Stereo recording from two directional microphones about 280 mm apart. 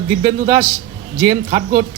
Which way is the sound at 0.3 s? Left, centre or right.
Right.